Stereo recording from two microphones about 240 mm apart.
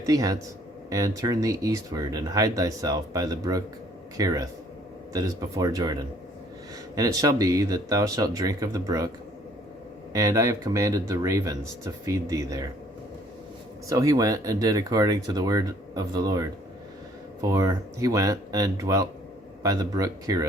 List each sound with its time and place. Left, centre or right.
0.0 s speech: centre
13.8 s speech: centre
17.5 s speech: centre